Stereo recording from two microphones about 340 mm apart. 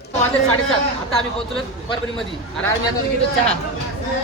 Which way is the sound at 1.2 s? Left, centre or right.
Centre.